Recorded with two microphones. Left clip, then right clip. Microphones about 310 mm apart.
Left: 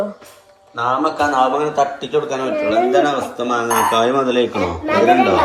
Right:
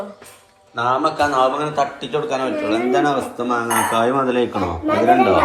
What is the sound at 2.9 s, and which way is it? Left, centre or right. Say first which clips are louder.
A man's voice: left 2 dB; centre.